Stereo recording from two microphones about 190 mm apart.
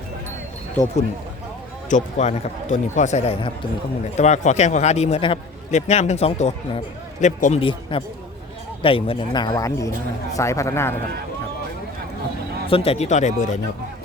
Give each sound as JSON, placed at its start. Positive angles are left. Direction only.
{"t": 1.9, "sound": "a man's voice", "side_deg": 40}
{"t": 12.6, "sound": "a man's voice", "side_deg": 30}